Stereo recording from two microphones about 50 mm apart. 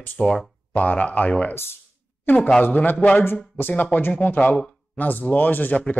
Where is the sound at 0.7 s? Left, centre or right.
Left.